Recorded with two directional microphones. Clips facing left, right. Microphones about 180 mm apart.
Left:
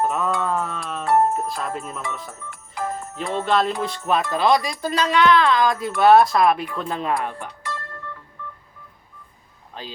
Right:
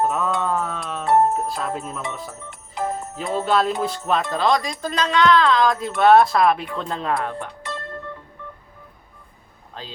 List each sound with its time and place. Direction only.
0.0 s mantra: centre (ahead or behind)
1.0 s music: 20° right (ahead or behind)
1.3 s speech: centre (ahead or behind)
2.4 s music: 20° right (ahead or behind)
3.3 s music: centre (ahead or behind)
4.4 s speech: 5° left (ahead or behind)
6.0 s music: centre (ahead or behind)
7.3 s music: 20° right (ahead or behind)